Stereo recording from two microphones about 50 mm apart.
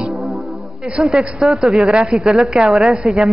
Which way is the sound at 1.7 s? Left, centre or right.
Centre.